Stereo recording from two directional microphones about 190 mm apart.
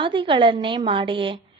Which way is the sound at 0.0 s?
25° right (ahead or behind).